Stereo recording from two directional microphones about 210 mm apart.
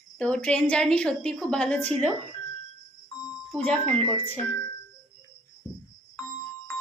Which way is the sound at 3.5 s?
5° left (ahead or behind).